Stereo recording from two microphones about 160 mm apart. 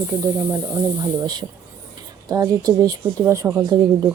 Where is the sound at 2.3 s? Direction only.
20° right (ahead or behind).